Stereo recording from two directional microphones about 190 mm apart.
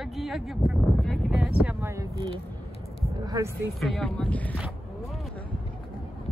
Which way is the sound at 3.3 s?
20° right (ahead or behind).